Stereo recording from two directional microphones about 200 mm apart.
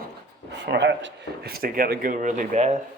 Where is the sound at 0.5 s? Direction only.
60° right (ahead or behind); by 2.7 s 35° right (ahead or behind).